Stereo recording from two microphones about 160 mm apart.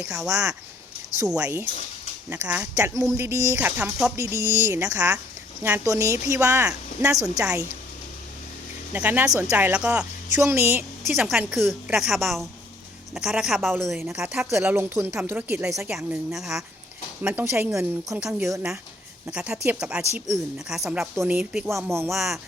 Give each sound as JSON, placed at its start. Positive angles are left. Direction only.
{"t": 0.0, "sound": "a woman's voice", "side_deg": -5}
{"t": 1.3, "sound": "speech", "side_deg": -10}
{"t": 2.7, "sound": "speech", "side_deg": -20}
{"t": 7.2, "sound": "a woman's voice", "side_deg": -5}
{"t": 8.9, "sound": "speech", "side_deg": -10}
{"t": 10.3, "sound": "a woman's voice", "side_deg": -20}
{"t": 17.2, "sound": "speech", "side_deg": -15}
{"t": 18.2, "sound": "a woman's voice", "side_deg": -5}
{"t": 22.1, "sound": "a woman's voice", "side_deg": 0}